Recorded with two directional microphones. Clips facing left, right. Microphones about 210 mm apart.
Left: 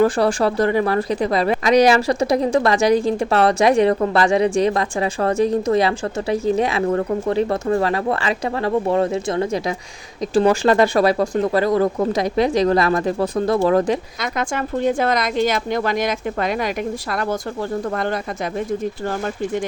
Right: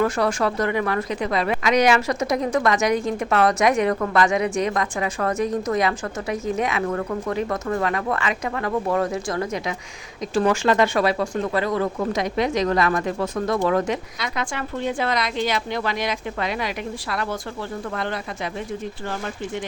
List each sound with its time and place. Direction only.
0.0 s speech: 30° left (ahead or behind)
14.2 s a woman's voice: 45° left (ahead or behind)